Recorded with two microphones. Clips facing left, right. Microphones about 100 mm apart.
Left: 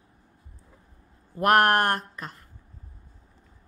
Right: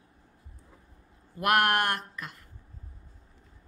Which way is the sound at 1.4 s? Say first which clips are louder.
Left 5 dB; 40° left (ahead or behind).